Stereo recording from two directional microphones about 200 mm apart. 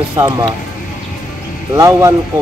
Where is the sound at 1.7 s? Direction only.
15° right (ahead or behind).